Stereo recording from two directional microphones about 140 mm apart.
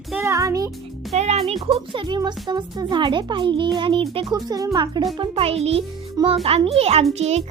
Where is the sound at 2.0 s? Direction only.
30° right (ahead or behind).